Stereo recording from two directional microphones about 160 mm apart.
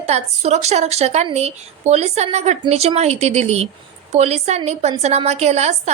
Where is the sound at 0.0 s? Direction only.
45° right (ahead or behind).